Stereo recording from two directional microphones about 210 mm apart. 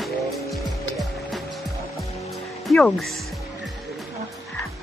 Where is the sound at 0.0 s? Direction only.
Centre (ahead or behind).